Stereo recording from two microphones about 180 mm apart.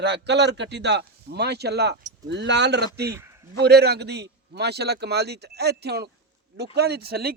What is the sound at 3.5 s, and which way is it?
A man's voice, 65° right (ahead or behind).